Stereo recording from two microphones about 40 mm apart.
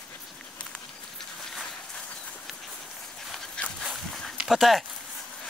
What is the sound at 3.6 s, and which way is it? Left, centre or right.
Dog, left.